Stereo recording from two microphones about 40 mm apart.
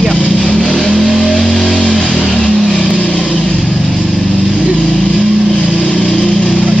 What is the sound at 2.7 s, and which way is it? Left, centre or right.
Vehicle, left.